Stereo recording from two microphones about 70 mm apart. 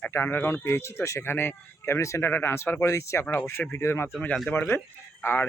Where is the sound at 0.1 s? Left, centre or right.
Left.